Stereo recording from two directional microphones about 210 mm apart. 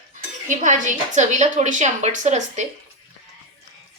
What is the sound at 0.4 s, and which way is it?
A woman's voice, 35° right (ahead or behind).